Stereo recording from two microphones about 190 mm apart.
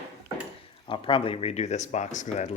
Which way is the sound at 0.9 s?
25° left (ahead or behind).